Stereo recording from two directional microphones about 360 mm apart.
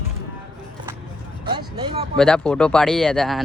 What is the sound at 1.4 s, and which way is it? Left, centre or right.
Speech, centre.